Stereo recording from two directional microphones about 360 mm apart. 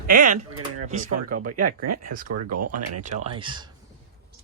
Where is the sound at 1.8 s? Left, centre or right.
Right.